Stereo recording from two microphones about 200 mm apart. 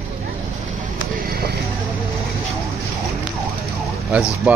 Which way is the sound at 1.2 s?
50° right (ahead or behind).